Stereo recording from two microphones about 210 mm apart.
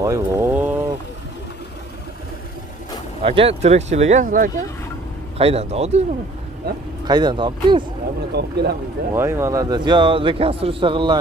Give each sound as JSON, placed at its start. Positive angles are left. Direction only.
{"t": 0.0, "sound": "a sound", "side_deg": -10}
{"t": 3.2, "sound": "speech", "side_deg": -30}
{"t": 5.4, "sound": "speech", "side_deg": -30}
{"t": 7.1, "sound": "a man's voice", "side_deg": -20}
{"t": 8.3, "sound": "speech", "side_deg": -50}
{"t": 9.1, "sound": "a man's voice", "side_deg": -10}